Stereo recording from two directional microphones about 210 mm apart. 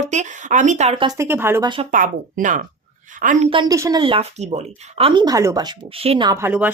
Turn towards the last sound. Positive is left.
turn(degrees=-10)  # may be behind; listen again after turning